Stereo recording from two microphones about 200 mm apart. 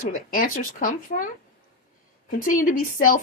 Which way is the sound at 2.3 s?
45° left (ahead or behind).